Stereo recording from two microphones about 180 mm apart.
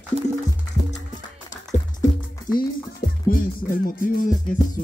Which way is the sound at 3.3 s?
50° left (ahead or behind).